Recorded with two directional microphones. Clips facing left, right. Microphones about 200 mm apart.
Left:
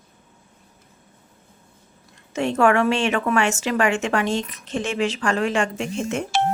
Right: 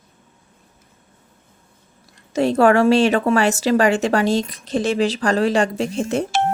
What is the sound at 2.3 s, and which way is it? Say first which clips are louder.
Speech: right 4 dB; 35° right (ahead or behind).